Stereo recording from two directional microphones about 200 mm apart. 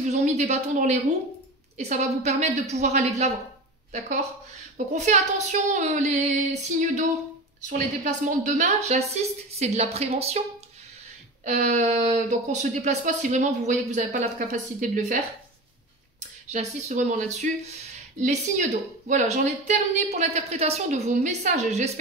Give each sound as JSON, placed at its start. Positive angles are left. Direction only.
{"t": 0.1, "sound": "speech", "side_deg": -35}
{"t": 4.7, "sound": "speech", "side_deg": -35}
{"t": 7.7, "sound": "speech", "side_deg": -40}
{"t": 11.4, "sound": "speech", "side_deg": -35}